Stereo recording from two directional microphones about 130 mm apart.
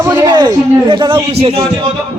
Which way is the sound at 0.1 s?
35° right (ahead or behind).